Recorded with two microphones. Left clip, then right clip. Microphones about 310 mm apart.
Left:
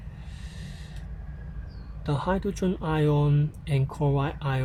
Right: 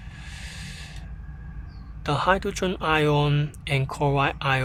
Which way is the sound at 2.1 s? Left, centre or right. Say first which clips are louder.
Right 6 dB; right.